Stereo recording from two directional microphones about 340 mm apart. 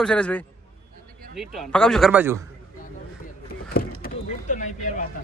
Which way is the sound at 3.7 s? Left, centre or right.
Left.